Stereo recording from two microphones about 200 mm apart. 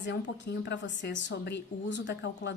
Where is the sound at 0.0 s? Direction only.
55° left (ahead or behind).